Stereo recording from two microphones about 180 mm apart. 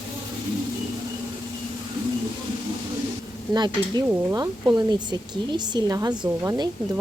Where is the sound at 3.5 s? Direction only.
20° right (ahead or behind).